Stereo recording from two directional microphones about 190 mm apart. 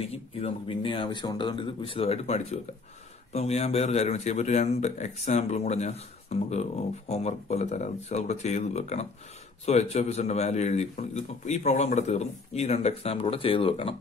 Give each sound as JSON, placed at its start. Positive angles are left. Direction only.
{"t": 0.1, "sound": "speech", "side_deg": 30}